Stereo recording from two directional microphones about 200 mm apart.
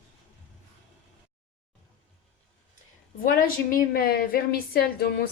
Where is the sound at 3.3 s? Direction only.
45° left (ahead or behind).